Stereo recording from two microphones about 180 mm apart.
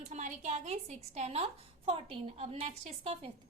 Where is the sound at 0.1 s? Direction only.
40° right (ahead or behind).